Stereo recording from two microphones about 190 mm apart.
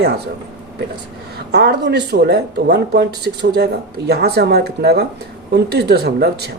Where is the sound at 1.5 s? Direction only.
60° right (ahead or behind).